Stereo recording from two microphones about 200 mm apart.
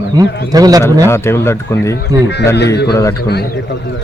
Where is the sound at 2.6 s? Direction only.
55° left (ahead or behind).